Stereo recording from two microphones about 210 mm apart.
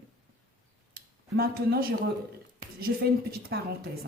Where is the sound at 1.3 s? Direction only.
45° right (ahead or behind).